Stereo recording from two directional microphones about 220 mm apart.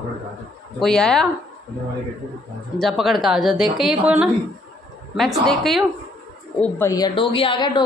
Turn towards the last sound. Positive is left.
turn(degrees=20)  # may be behind; listen again after turning